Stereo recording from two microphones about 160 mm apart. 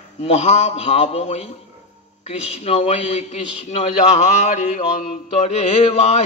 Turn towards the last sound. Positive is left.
turn(degrees=45)  # may be behind; listen again after turning